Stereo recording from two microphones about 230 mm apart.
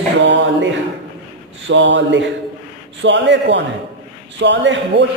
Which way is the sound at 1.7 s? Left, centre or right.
Right.